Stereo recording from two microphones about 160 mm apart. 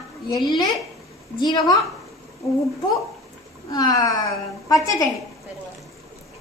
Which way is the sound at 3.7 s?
25° left (ahead or behind).